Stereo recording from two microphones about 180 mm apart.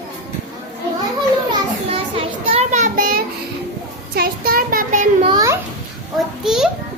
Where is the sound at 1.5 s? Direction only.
30° right (ahead or behind); by 5.0 s 50° right (ahead or behind).